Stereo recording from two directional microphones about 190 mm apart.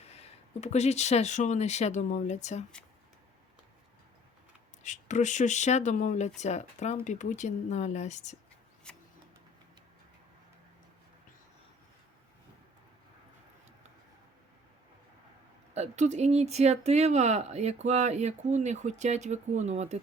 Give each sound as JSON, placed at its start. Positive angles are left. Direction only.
{"t": 0.0, "sound": "speech", "side_deg": 35}
{"t": 4.8, "sound": "speech", "side_deg": 40}
{"t": 8.9, "sound": "a sound", "side_deg": 5}
{"t": 15.7, "sound": "speech", "side_deg": -35}